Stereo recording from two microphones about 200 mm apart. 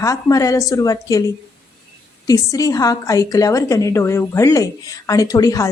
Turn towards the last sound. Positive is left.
turn(degrees=15)  # may be behind; listen again after turning